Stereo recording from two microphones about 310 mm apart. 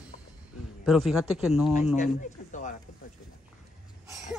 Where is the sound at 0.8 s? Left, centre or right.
Centre.